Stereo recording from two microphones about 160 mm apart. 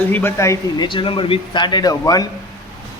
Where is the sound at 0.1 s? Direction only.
15° left (ahead or behind).